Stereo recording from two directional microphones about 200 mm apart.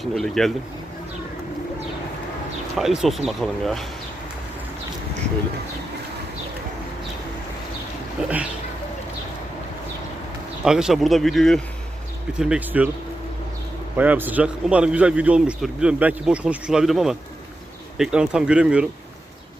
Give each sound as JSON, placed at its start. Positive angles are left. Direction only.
{"t": 0.0, "sound": "a man's voice", "side_deg": 0}
{"t": 2.7, "sound": "a man's voice", "side_deg": 0}
{"t": 10.6, "sound": "a man's voice", "side_deg": -5}
{"t": 13.9, "sound": "a man's voice", "side_deg": -10}